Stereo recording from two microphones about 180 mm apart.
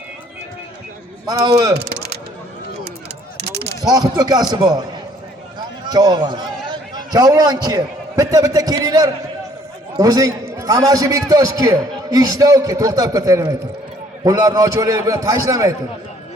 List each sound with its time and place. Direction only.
1.5 s a man's voice: 20° right (ahead or behind)
1.7 s speech: 65° right (ahead or behind)
3.3 s a sound: 70° right (ahead or behind)
3.8 s a man's voice: 20° right (ahead or behind)